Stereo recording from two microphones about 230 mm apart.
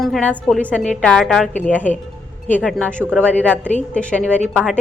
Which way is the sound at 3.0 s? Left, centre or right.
Centre.